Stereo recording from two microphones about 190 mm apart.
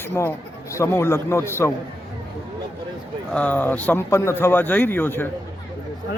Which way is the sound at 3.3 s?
5° left (ahead or behind).